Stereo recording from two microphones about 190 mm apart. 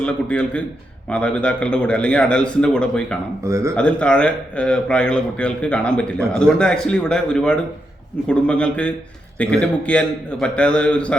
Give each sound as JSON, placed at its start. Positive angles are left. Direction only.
{"t": 0.0, "sound": "a man's voice", "side_deg": 5}
{"t": 3.4, "sound": "speech", "side_deg": -15}
{"t": 3.8, "sound": "a man's voice", "side_deg": 5}